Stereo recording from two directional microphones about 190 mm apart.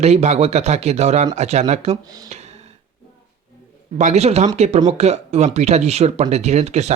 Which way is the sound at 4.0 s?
35° right (ahead or behind).